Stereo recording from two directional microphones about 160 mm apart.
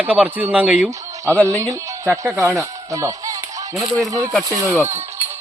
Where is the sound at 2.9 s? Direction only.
20° right (ahead or behind).